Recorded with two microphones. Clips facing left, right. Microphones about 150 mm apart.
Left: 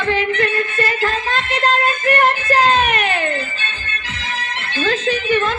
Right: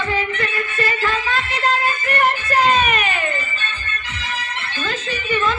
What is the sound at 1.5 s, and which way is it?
Music, 60° left (ahead or behind).